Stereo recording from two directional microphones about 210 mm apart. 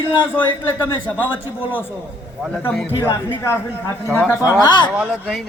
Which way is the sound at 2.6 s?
Centre (ahead or behind).